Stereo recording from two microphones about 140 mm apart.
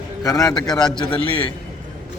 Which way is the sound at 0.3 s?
25° left (ahead or behind).